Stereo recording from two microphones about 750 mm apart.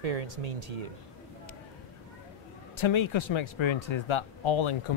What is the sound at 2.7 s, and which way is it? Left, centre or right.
Speech, left.